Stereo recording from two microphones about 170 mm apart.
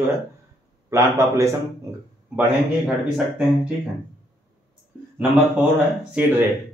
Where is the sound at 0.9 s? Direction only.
15° right (ahead or behind).